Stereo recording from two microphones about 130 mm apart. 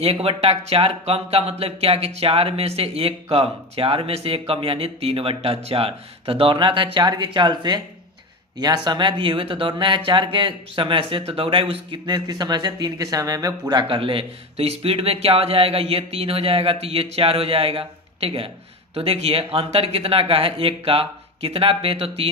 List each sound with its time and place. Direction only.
0.0 s speech: 50° right (ahead or behind); by 13.8 s 30° right (ahead or behind)
13.8 s speech: 45° right (ahead or behind)